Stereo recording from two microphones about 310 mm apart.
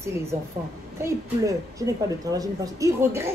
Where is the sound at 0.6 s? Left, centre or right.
Right.